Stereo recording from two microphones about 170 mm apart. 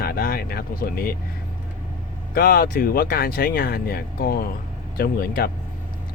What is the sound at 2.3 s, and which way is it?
Speech, 60° left (ahead or behind).